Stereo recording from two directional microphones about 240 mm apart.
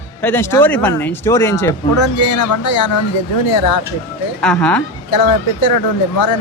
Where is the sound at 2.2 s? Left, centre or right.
Left.